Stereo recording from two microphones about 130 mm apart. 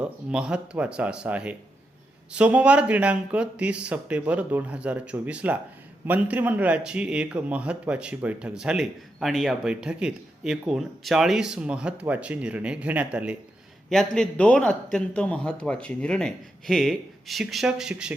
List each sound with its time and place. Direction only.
0.0 s speech: 5° right (ahead or behind)
13.9 s a man's voice: 5° left (ahead or behind)